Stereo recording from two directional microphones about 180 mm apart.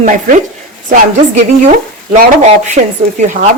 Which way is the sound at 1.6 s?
45° right (ahead or behind).